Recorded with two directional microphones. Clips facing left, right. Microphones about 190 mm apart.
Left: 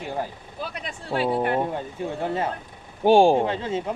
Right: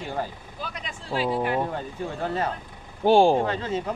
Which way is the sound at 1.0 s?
60° left (ahead or behind).